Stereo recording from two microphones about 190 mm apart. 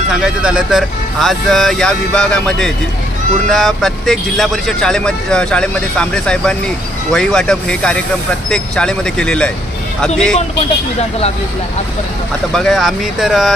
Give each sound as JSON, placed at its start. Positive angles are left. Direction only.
{"t": 0.1, "sound": "speech", "side_deg": -5}
{"t": 12.5, "sound": "speech", "side_deg": 0}